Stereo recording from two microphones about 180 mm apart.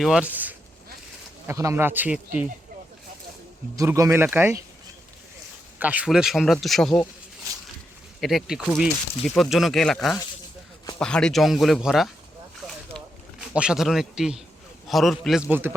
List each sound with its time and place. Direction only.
0.0 s speech: 5° right (ahead or behind)
3.8 s speech: 15° right (ahead or behind)
5.8 s speech: 10° right (ahead or behind)
8.2 s speech: centre (ahead or behind)
12.9 s a sound: 5° left (ahead or behind)
13.5 s speech: 5° right (ahead or behind)